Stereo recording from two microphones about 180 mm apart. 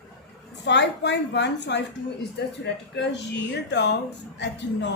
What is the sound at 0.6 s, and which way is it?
A woman's voice, 75° left (ahead or behind).